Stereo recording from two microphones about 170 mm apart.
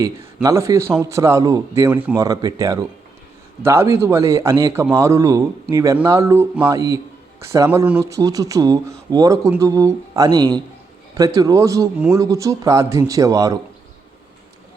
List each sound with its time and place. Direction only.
0.4 s a man's voice: 20° right (ahead or behind)
2.2 s a man's voice: 20° right (ahead or behind)